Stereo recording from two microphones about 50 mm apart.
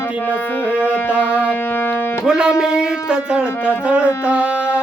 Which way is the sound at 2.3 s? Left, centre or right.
Centre.